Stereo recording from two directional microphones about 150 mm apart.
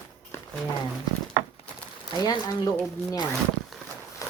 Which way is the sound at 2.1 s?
30° left (ahead or behind).